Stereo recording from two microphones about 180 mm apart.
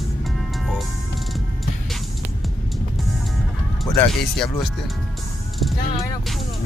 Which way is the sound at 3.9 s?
5° left (ahead or behind).